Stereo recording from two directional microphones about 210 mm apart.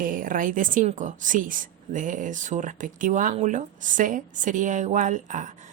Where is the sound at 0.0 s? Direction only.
40° right (ahead or behind).